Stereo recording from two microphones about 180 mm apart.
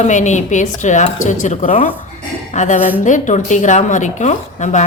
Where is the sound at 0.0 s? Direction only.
40° left (ahead or behind).